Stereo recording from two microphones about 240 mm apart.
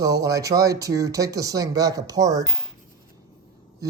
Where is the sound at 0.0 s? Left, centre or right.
Centre.